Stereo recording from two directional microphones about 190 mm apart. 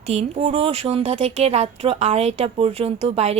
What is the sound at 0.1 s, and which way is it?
Speech, 35° right (ahead or behind).